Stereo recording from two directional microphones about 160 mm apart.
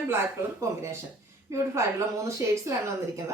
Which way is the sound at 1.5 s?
20° right (ahead or behind).